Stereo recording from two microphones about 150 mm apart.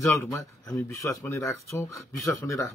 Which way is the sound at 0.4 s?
20° left (ahead or behind).